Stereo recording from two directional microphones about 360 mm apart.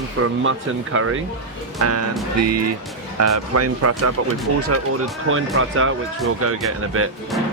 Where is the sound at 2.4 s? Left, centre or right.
Right.